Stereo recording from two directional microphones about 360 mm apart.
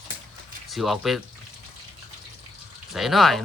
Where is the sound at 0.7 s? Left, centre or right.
Centre.